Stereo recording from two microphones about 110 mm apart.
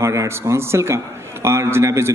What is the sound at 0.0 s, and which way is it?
A man's voice, 25° right (ahead or behind).